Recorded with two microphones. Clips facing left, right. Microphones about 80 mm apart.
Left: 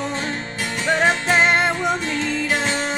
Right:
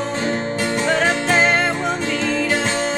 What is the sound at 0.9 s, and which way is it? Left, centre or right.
Music, centre.